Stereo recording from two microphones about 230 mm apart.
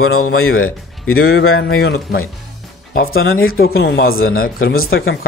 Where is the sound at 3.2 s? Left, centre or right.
Left.